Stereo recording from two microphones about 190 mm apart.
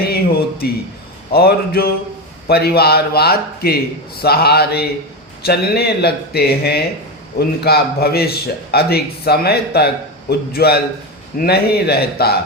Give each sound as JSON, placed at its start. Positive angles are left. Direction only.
{"t": 0.0, "sound": "a man's voice", "side_deg": 55}